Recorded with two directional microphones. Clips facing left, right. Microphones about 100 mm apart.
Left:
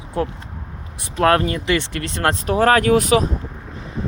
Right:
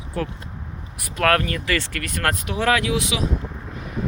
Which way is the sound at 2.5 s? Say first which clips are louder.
Left 8 dB; 45° left (ahead or behind).